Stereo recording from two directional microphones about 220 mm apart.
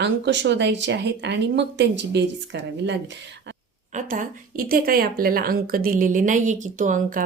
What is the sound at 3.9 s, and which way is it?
Speech, 35° right (ahead or behind).